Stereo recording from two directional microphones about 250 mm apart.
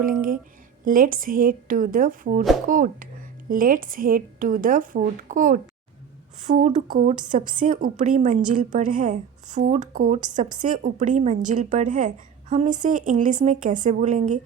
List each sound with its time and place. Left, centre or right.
0.0 s speech: right